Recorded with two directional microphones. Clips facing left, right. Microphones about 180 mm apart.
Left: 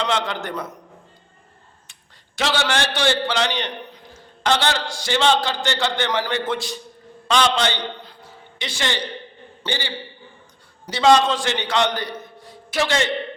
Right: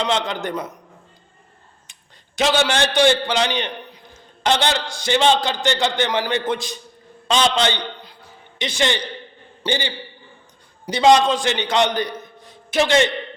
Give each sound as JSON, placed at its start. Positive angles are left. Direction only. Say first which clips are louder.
{"t": 0.0, "sound": "a man's voice", "louder": "right 2 dB", "side_deg": -20}
{"t": 1.9, "sound": "a man's voice", "louder": "right 1 dB", "side_deg": -15}